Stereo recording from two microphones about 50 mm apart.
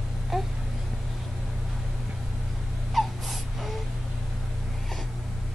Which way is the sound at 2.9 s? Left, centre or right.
Centre.